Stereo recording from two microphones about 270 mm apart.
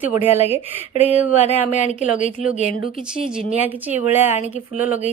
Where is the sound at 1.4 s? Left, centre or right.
Left.